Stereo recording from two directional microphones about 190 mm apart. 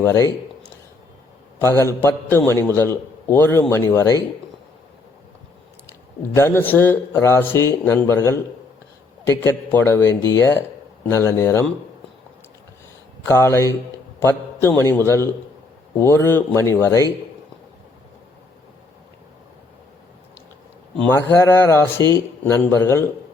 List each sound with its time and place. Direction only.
0.0 s a man's voice: 15° left (ahead or behind)
1.5 s a man's voice: 15° left (ahead or behind)
6.3 s a man's voice: 10° left (ahead or behind)
13.2 s a man's voice: 15° left (ahead or behind)
21.1 s a man's voice: 10° left (ahead or behind)